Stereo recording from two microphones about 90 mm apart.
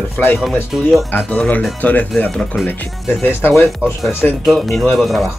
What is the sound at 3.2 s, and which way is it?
Speech, 20° left (ahead or behind).